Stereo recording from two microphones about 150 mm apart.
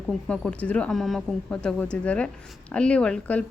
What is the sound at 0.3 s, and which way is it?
Speech, 10° left (ahead or behind).